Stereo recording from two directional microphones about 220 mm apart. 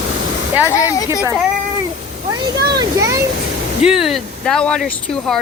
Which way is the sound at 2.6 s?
15° right (ahead or behind).